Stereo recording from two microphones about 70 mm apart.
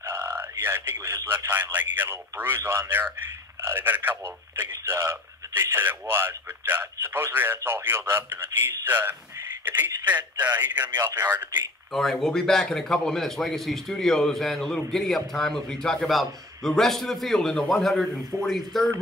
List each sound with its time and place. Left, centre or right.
0.0 s a man's voice: right
11.9 s a man's voice: centre